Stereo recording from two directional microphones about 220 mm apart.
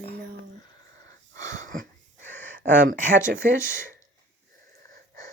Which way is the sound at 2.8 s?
35° right (ahead or behind).